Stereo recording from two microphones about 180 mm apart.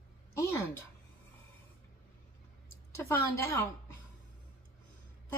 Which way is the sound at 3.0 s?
15° left (ahead or behind).